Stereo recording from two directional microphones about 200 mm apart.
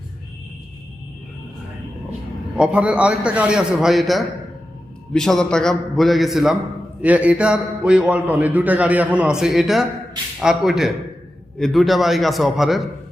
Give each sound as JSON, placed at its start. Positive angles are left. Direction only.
{"t": 2.6, "sound": "a man's voice", "side_deg": -5}